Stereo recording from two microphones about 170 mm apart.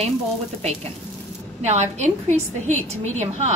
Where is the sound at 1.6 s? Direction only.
40° right (ahead or behind).